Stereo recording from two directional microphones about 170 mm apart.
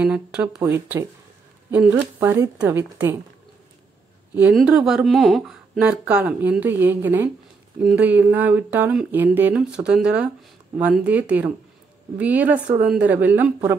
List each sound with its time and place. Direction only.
0.0 s speech: 5° right (ahead or behind)
0.6 s speech: 15° right (ahead or behind)
4.4 s speech: 5° right (ahead or behind)